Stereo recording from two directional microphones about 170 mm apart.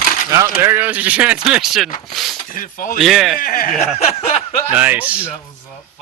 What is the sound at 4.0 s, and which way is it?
Speech, 35° left (ahead or behind).